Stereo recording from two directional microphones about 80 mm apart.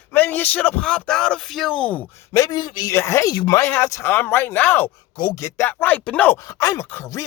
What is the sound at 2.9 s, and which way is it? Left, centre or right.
Speech, left.